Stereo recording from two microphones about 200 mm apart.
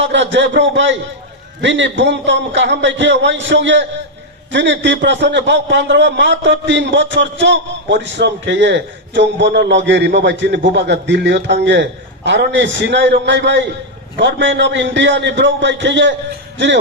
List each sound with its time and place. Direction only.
0.0 s a man's voice: 65° right (ahead or behind)